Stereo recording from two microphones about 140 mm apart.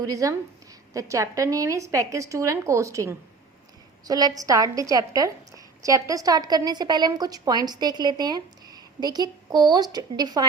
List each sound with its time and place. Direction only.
0.0 s a woman's voice: 25° right (ahead or behind)